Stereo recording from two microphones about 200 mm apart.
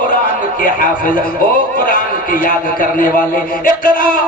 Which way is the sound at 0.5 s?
45° left (ahead or behind).